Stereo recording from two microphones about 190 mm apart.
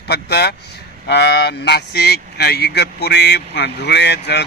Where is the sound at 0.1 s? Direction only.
60° left (ahead or behind).